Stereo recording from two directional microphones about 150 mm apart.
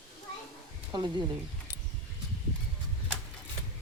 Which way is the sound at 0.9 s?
30° right (ahead or behind).